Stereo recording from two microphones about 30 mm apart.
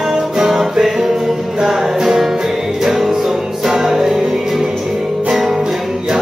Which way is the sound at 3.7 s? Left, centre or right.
Centre.